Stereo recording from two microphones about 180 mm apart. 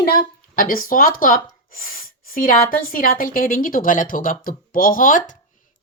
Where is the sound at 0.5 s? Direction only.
50° left (ahead or behind).